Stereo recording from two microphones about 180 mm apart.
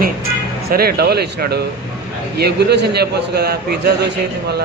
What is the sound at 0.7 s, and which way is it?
A man's voice, 55° right (ahead or behind).